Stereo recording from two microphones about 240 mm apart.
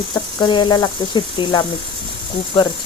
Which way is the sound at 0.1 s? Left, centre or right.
Centre.